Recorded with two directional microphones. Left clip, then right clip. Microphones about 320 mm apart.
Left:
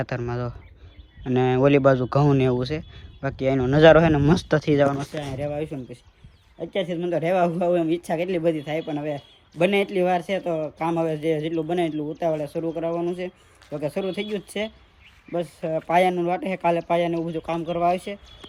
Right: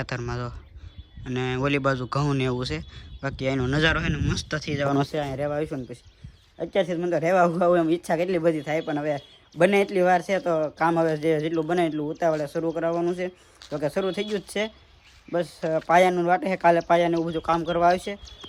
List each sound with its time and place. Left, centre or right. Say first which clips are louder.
0.0 s speech: left 3 dB; centre
5.2 s speech: right 1 dB; centre